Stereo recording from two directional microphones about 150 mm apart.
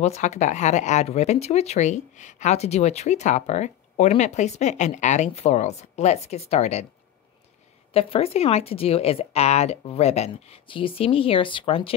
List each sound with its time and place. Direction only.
0.0 s speech: 50° left (ahead or behind)
7.9 s speech: 40° left (ahead or behind)